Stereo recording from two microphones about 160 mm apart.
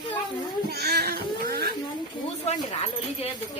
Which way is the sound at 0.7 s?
85° right.